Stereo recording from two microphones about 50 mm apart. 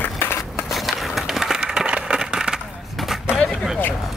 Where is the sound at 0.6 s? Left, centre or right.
Centre.